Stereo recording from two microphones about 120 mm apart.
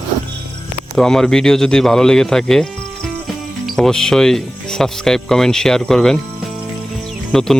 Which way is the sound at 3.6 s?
5° left (ahead or behind).